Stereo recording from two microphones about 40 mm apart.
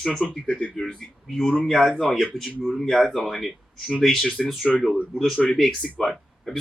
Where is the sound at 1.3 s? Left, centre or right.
Centre.